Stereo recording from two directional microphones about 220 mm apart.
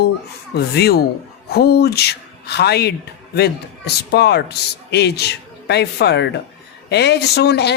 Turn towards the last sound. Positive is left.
turn(degrees=50)  # may be behind; listen again after turning